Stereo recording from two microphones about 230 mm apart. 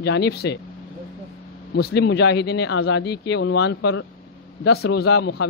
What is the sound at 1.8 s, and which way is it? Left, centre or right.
A man's voice, left.